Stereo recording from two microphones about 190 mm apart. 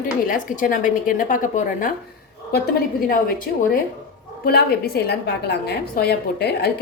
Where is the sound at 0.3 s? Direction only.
45° left (ahead or behind).